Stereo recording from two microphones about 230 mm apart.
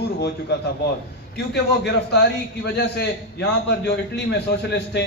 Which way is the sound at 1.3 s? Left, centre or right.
Left.